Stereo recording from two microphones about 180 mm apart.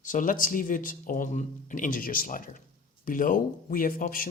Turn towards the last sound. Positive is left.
turn(degrees=50)  # may be behind; listen again after turning